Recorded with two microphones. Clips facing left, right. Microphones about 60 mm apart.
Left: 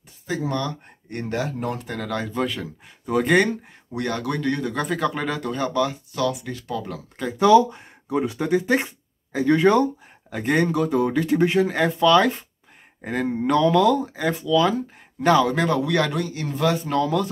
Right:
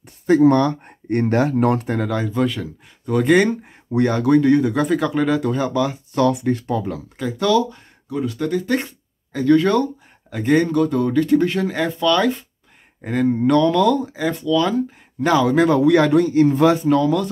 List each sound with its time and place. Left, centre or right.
0.3 s speech: right
2.0 s speech: centre
3.9 s speech: right
4.8 s speech: centre
6.1 s speech: right
6.8 s speech: centre
7.3 s speech: centre
10.3 s speech: centre
11.7 s a man's voice: centre; by 16.8 s right
16.8 s speech: centre